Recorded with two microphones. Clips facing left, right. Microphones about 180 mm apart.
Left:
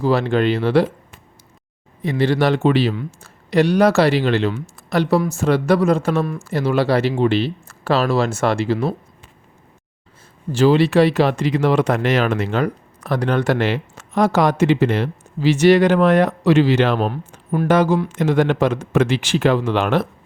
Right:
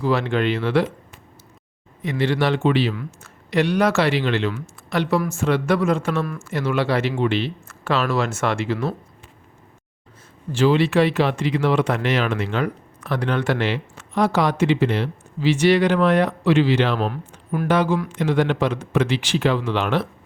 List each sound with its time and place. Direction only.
0.0 s speech: 35° left (ahead or behind)
2.0 s speech: 35° left (ahead or behind)
10.5 s speech: 40° left (ahead or behind)